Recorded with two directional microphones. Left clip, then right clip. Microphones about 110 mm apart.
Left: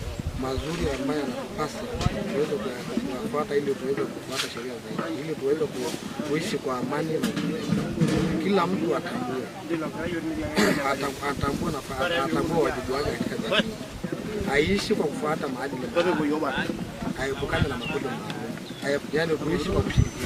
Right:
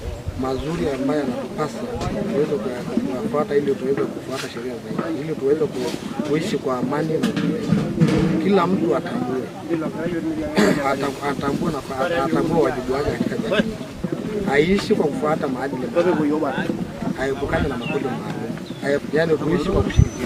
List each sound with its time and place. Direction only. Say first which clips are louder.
0.4 s speech: right 5 dB; centre (ahead or behind)
3.3 s speech: right 6 dB; 5° left (ahead or behind)
6.3 s speech: right 6 dB; centre (ahead or behind)
9.7 s speech: right 5 dB; 15° left (ahead or behind)
10.5 s speech: right 5 dB; centre (ahead or behind)
16.0 s speech: right 5 dB; 15° left (ahead or behind)